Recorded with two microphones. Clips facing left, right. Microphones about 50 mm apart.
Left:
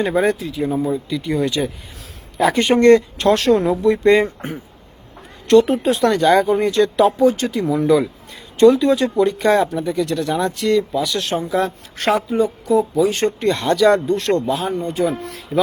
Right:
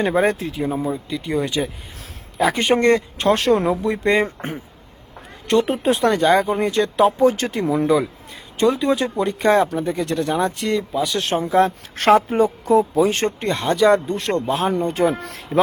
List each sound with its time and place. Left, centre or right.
0.0 s speech: right
0.6 s speech: right
0.9 s speech: centre
2.7 s speech: centre
5.5 s speech: centre
7.3 s speech: right
12.0 s a woman's voice: right
12.9 s speech: right
13.4 s speech: right
14.4 s speech: right
14.7 s speech: right